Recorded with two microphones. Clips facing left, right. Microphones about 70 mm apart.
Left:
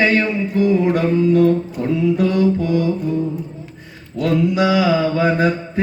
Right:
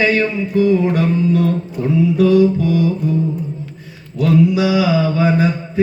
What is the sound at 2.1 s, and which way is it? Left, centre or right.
Mantra, left.